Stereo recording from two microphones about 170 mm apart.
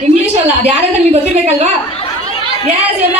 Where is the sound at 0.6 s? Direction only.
35° right (ahead or behind).